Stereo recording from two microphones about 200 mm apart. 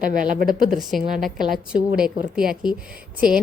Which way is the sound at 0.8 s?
Centre (ahead or behind).